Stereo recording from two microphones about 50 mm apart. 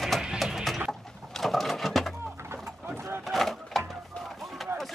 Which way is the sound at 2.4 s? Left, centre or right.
Right.